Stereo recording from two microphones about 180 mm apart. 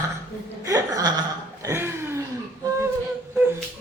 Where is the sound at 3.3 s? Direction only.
10° right (ahead or behind).